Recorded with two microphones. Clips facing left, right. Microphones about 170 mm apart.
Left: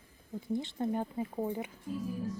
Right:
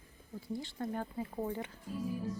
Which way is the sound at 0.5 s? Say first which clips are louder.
Left 5 dB; 20° left (ahead or behind).